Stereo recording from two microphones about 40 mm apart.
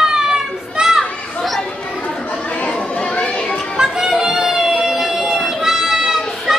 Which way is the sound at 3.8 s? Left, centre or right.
Centre.